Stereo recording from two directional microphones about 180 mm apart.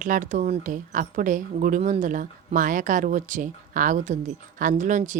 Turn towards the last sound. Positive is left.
turn(degrees=-45)  # may be behind; listen again after turning